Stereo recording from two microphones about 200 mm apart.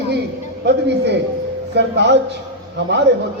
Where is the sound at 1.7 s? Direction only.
60° right (ahead or behind).